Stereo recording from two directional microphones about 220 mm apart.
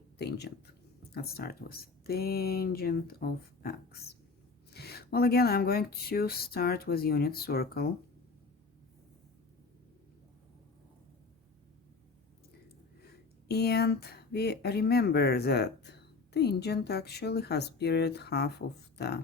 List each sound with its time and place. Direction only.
0.2 s a sound: 50° left (ahead or behind)
1.1 s speech: 45° left (ahead or behind)
13.5 s speech: 45° left (ahead or behind)